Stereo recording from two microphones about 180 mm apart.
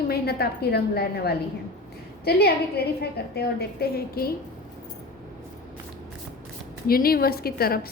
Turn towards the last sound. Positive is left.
turn(degrees=60)  # may be behind; listen again after turning